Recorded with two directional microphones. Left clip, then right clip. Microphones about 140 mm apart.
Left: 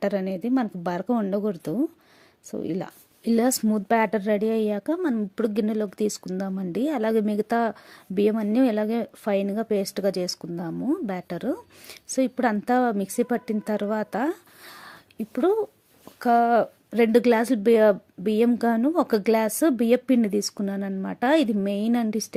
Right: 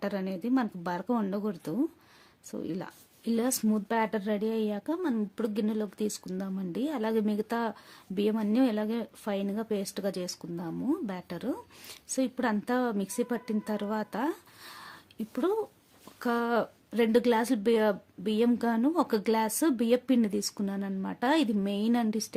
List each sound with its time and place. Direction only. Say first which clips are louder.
0.0 s speech: left 8 dB; 35° left (ahead or behind)